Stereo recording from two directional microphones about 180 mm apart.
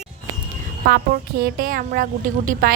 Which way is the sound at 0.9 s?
60° right (ahead or behind).